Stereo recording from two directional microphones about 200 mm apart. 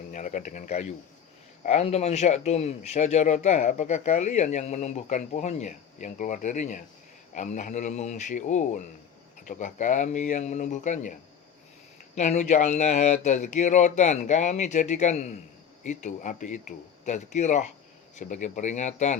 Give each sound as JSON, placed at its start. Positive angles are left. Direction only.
{"t": 0.1, "sound": "speech", "side_deg": 40}
{"t": 12.1, "sound": "speech", "side_deg": 35}